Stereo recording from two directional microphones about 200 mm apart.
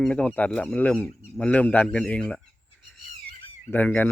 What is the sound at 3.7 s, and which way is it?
Speech, 10° left (ahead or behind).